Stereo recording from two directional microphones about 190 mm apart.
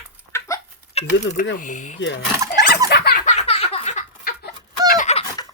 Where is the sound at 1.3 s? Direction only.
65° left (ahead or behind).